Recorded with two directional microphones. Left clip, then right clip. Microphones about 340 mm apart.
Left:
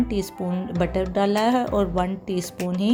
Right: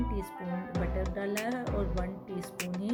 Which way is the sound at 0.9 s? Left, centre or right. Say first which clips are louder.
Left 14 dB; centre.